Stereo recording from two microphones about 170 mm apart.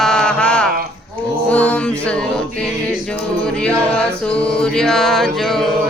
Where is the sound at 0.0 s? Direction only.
5° left (ahead or behind).